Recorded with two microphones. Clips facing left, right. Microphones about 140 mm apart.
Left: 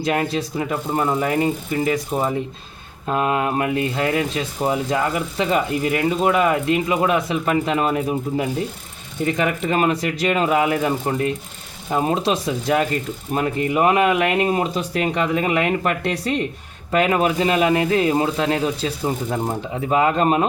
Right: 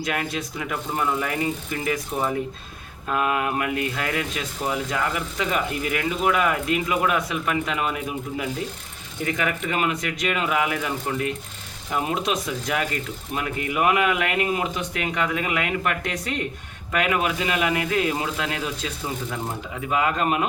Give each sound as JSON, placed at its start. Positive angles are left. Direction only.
{"t": 0.0, "sound": "speech", "side_deg": 30}